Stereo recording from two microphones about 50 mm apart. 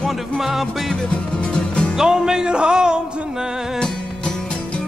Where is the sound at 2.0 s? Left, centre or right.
Centre.